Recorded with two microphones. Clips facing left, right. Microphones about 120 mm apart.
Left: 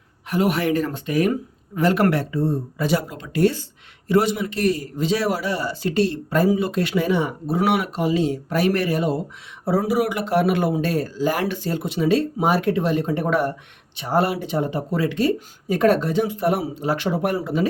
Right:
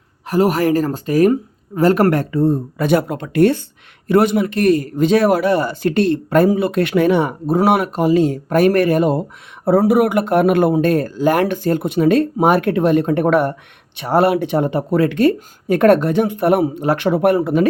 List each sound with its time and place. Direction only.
0.3 s speech: 40° right (ahead or behind); by 17.7 s 60° right (ahead or behind)